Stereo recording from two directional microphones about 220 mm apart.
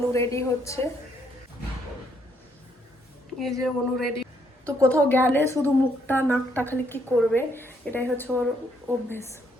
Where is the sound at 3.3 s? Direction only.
Centre (ahead or behind).